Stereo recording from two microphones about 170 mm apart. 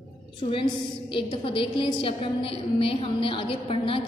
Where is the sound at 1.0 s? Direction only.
30° left (ahead or behind).